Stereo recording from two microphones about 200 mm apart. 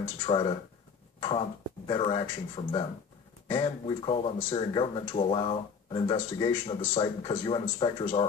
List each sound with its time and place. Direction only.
0.3 s speech: 25° left (ahead or behind)
1.9 s speech: 25° left (ahead or behind)